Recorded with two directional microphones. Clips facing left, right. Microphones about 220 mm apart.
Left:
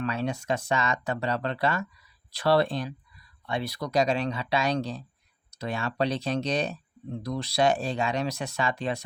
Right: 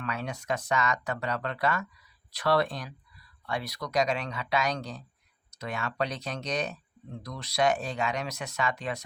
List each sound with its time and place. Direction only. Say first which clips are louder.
0.0 s speech: left 6 dB; 30° left (ahead or behind)